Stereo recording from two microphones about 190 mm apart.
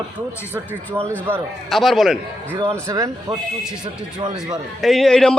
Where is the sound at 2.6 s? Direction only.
15° right (ahead or behind).